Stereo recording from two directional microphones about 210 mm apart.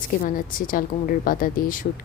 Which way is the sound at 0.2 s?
40° left (ahead or behind).